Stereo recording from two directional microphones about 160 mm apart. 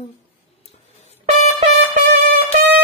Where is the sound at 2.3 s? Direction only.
85° right.